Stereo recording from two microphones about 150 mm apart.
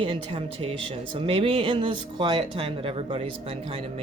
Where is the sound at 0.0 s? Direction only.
35° right (ahead or behind).